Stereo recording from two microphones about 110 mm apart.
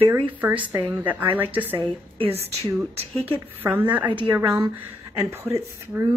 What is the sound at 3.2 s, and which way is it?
Speech, 15° right (ahead or behind).